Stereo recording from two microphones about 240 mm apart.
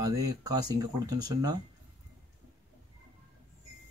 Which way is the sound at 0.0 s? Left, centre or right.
Centre.